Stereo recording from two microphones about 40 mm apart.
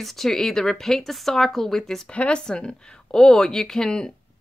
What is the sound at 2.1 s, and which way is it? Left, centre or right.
Speech, left.